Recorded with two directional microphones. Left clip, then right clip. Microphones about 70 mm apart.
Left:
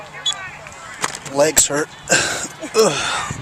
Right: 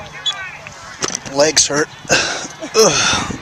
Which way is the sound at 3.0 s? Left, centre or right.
Right.